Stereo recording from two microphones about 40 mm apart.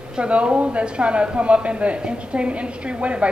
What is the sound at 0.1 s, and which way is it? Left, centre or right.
A woman's voice, right.